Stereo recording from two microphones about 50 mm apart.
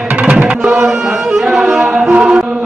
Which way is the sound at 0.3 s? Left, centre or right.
Right.